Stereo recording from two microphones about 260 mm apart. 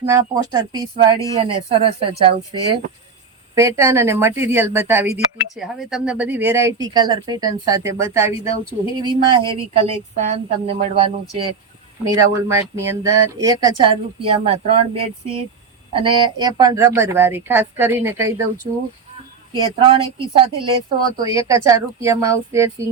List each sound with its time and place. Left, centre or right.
0.0 s a woman's voice: centre